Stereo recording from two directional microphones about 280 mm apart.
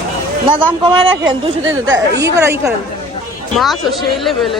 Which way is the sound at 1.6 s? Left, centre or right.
Right.